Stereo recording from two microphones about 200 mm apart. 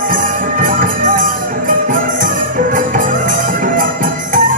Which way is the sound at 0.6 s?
40° right (ahead or behind).